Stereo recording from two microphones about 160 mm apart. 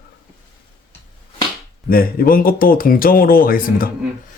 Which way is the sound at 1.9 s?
65° left (ahead or behind).